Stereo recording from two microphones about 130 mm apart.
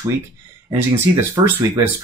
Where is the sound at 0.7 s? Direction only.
15° right (ahead or behind).